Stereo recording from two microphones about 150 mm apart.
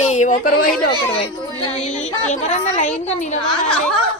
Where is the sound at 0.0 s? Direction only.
50° left (ahead or behind).